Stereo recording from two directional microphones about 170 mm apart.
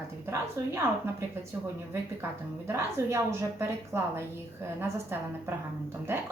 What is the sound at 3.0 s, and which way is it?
A woman's voice, 15° right (ahead or behind).